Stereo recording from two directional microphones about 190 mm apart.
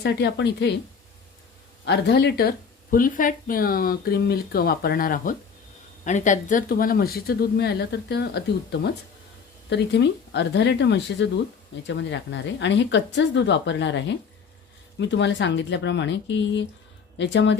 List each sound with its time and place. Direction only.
0.0 s speech: 60° left (ahead or behind)
1.8 s a woman's voice: 60° left (ahead or behind)